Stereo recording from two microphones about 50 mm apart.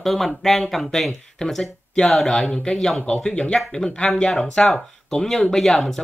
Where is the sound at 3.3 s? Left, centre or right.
Left.